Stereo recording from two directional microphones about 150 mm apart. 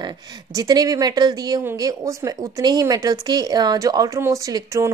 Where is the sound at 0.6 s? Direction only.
25° right (ahead or behind).